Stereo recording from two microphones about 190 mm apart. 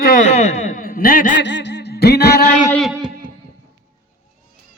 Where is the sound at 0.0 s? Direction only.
45° left (ahead or behind).